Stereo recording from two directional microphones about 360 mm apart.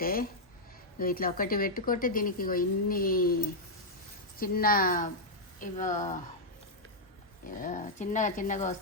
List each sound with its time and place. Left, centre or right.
0.0 s a woman's voice: left
4.4 s a woman's voice: left
7.4 s a woman's voice: left